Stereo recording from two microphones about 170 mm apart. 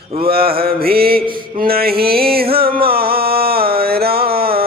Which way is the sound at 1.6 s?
60° right (ahead or behind).